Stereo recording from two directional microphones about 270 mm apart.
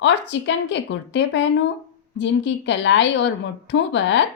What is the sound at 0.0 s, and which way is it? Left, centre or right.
A woman's voice, left.